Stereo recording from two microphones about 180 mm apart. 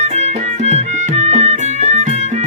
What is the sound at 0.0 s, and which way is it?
Music, 40° right (ahead or behind).